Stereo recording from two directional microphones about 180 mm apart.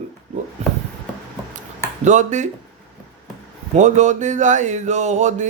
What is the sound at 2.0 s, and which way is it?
Mantra, 40° right (ahead or behind).